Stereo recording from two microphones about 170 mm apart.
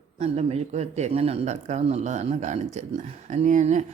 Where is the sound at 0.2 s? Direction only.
40° right (ahead or behind).